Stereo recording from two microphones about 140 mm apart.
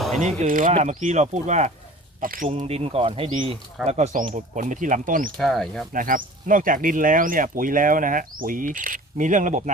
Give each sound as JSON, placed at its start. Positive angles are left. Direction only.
{"t": 0.2, "sound": "speech", "side_deg": -55}
{"t": 0.7, "sound": "speech", "side_deg": -55}
{"t": 2.2, "sound": "speech", "side_deg": -80}
{"t": 2.5, "sound": "speech", "side_deg": -50}
{"t": 3.8, "sound": "speech", "side_deg": -55}
{"t": 5.4, "sound": "speech", "side_deg": 0}
{"t": 5.9, "sound": "speech", "side_deg": -75}